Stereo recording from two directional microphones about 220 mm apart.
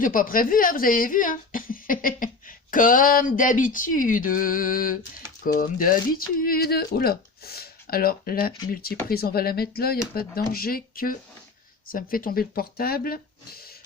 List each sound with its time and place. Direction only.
0.0 s speech: 40° left (ahead or behind)